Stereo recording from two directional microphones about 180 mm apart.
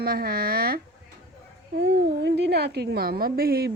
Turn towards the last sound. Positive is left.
turn(degrees=-55)  # may be behind; listen again after turning